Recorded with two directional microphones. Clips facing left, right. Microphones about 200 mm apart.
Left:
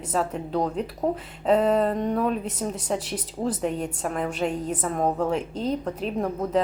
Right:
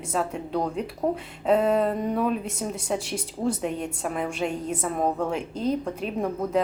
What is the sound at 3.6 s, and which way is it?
A woman's voice, 5° right (ahead or behind).